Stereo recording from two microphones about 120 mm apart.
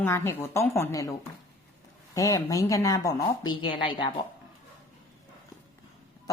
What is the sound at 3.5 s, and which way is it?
Speech, 40° left (ahead or behind).